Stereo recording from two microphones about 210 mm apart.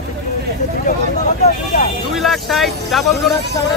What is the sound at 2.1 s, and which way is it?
Speech, centre (ahead or behind).